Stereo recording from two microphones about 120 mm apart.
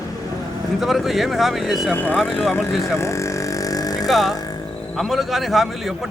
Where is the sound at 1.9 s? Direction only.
15° left (ahead or behind).